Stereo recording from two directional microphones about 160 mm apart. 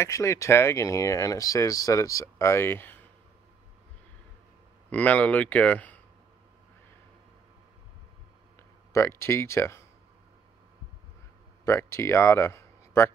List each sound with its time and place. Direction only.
0.0 s speech: 20° left (ahead or behind)
4.8 s speech: 10° left (ahead or behind)
8.5 s speech: 15° left (ahead or behind)
11.6 s speech: 15° left (ahead or behind)